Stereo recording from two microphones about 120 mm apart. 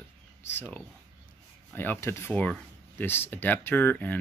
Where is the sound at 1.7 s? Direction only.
20° left (ahead or behind).